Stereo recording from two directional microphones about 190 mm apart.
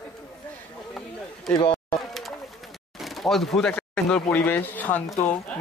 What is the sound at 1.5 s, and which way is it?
Speech, 25° left (ahead or behind).